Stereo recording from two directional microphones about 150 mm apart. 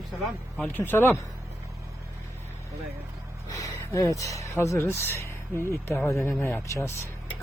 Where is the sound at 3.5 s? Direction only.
25° left (ahead or behind).